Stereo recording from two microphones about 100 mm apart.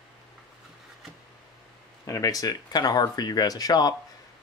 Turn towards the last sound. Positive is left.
turn(degrees=40)  # may be behind; listen again after turning